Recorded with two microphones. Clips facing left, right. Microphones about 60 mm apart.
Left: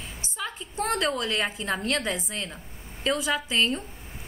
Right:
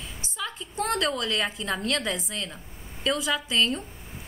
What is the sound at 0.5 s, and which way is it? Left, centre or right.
A woman's voice, centre.